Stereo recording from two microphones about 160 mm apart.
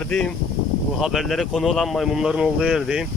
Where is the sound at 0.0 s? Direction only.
5° left (ahead or behind).